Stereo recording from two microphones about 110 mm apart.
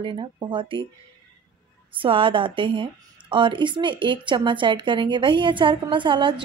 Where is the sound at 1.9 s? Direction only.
50° right (ahead or behind).